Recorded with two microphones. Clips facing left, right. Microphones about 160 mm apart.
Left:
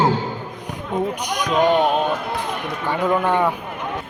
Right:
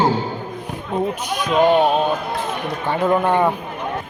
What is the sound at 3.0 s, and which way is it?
Speech, 20° right (ahead or behind).